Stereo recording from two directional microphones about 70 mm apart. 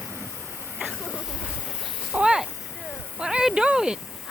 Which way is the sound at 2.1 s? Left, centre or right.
Centre.